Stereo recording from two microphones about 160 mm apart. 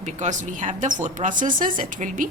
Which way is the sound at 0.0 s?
50° right (ahead or behind).